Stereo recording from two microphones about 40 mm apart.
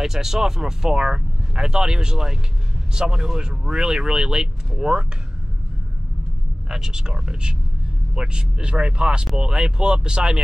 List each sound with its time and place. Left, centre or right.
0.0 s speech: centre
6.7 s speech: centre